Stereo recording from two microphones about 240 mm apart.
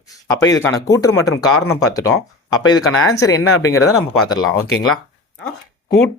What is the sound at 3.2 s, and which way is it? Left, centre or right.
Speech, centre.